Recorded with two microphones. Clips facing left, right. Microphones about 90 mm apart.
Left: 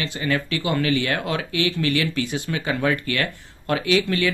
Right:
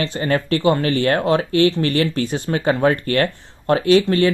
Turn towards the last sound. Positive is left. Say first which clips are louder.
# right 7 dB
turn(degrees=-35)  # may be behind; listen again after turning